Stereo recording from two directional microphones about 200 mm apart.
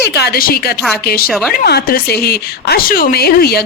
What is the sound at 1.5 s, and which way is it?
A woman's voice, 50° left (ahead or behind).